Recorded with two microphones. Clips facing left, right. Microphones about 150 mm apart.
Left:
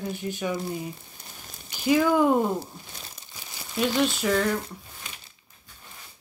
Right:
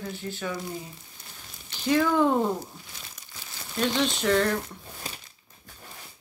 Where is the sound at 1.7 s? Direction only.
10° left (ahead or behind).